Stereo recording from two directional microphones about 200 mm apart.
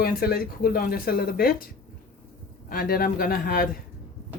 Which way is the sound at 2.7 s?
45° left (ahead or behind).